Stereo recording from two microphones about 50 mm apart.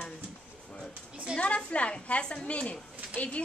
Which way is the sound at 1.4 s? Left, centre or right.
Left.